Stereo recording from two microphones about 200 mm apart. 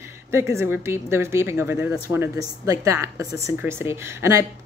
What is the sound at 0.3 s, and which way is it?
A woman's voice, 15° right (ahead or behind).